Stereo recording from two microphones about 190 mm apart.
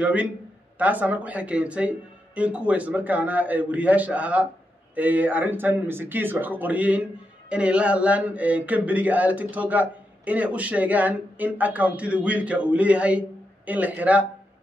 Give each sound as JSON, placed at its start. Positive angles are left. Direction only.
{"t": 0.0, "sound": "speech", "side_deg": -10}